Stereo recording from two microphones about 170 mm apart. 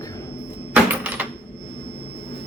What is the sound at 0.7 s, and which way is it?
Coin, 10° right (ahead or behind).